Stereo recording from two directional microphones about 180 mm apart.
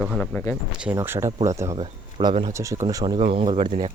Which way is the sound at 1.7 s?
30° right (ahead or behind).